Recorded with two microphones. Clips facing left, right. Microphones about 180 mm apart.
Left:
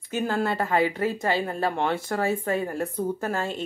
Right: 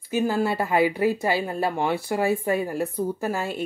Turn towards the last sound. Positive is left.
turn(degrees=-10)  # may be behind; listen again after turning